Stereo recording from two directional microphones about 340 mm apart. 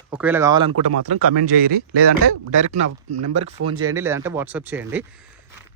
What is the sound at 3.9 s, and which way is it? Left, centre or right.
Speech, centre.